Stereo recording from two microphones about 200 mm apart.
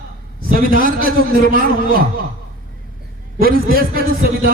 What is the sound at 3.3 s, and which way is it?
A man's voice, 45° right (ahead or behind).